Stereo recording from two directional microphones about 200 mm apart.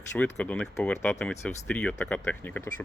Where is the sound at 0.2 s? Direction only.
5° left (ahead or behind).